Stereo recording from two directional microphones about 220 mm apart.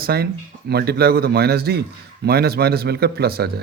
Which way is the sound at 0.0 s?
45° right (ahead or behind).